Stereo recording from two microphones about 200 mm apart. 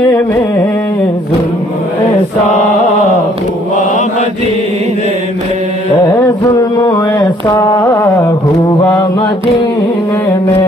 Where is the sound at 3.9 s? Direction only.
35° left (ahead or behind).